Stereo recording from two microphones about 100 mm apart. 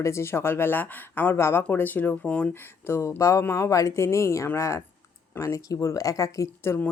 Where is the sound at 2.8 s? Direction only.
25° left (ahead or behind).